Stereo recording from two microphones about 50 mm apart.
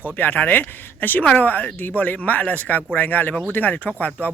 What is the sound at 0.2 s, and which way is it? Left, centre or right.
Speech, left.